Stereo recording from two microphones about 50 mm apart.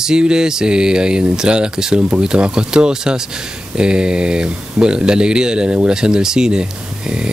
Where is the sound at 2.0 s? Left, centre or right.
Right.